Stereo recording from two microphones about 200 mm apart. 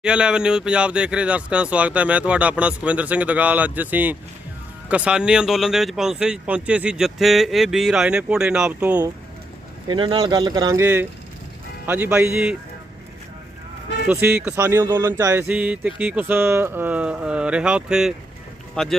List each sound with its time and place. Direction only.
0.0 s speech: 5° right (ahead or behind)
9.8 s speech: 25° right (ahead or behind)
11.9 s speech: 10° right (ahead or behind)
14.1 s speech: 10° right (ahead or behind)